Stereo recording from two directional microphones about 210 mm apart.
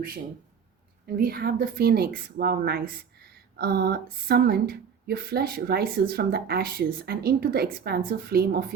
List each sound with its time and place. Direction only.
1.0 s speech: 45° right (ahead or behind)